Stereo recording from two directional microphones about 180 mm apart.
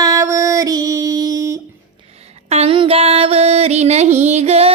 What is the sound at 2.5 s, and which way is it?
Music, 35° right (ahead or behind).